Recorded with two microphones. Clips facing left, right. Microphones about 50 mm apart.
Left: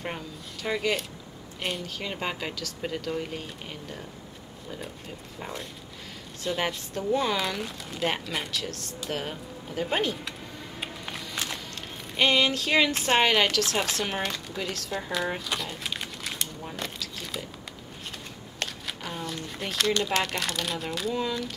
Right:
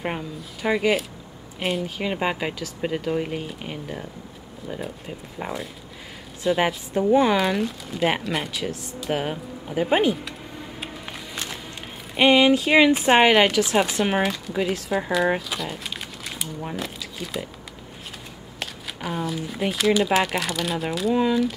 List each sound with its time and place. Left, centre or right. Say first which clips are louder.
0.0 s speech: right 6 dB; centre
2.0 s speech: right 7 dB; centre
5.4 s speech: right 7 dB; right
6.4 s speech: right 7 dB; centre
9.1 s speech: right 8 dB; centre
10.8 s music: left 1 dB; centre
12.2 s speech: right 7 dB; centre
14.3 s speech: right 5 dB; centre
14.6 s speech: right 10 dB; centre
15.3 s crumpling: right 4 dB; centre
16.7 s speech: right 4 dB; centre
18.6 s speech: right 2 dB; centre
21.1 s speech: right 11 dB; centre